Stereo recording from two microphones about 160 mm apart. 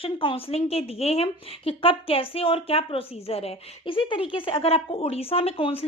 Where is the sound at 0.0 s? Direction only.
35° left (ahead or behind).